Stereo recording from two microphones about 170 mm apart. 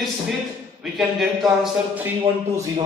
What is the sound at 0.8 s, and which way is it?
Speech, centre (ahead or behind).